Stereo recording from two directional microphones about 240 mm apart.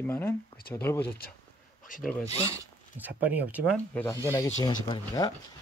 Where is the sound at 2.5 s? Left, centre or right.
Centre.